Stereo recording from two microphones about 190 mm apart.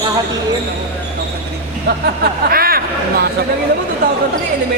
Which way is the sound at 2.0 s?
55° right (ahead or behind).